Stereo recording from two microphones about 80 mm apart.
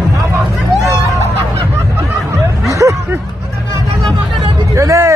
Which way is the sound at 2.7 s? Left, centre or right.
Right.